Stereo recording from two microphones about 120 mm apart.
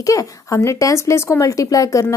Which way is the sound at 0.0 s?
30° left (ahead or behind).